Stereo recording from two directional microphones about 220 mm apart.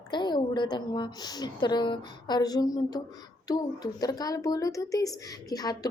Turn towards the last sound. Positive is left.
turn(degrees=15)  # may be behind; listen again after turning